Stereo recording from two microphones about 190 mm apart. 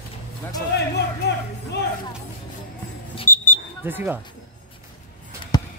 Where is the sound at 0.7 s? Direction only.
60° left (ahead or behind).